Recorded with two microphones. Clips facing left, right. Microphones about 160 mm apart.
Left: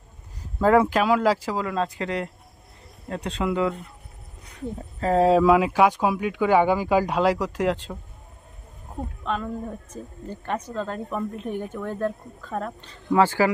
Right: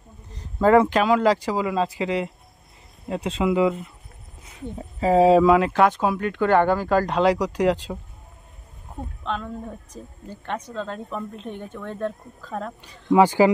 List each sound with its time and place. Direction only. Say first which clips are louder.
0.3 s speech: right 2 dB; 5° left (ahead or behind)
9.2 s speech: left 1 dB; 5° left (ahead or behind)
12.8 s speech: right 4 dB; 15° right (ahead or behind)